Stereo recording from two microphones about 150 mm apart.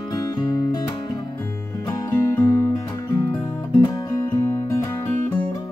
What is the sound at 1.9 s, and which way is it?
Music, 25° left (ahead or behind).